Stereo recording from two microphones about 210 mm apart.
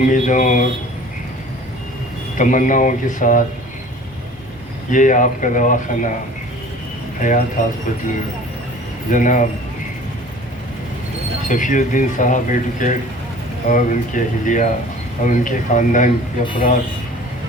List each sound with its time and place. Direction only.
0.0 s speech: 40° left (ahead or behind)
2.4 s speech: 40° left (ahead or behind)
4.9 s speech: 40° left (ahead or behind)
7.2 s speech: 40° left (ahead or behind)
9.1 s speech: 40° left (ahead or behind)
11.4 s speech: 40° left (ahead or behind)